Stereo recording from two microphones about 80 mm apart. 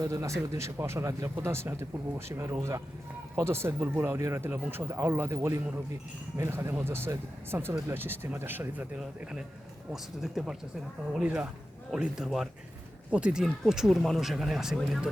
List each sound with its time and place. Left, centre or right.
0.0 s speech: right
9.9 s speech: centre
13.4 s speech: centre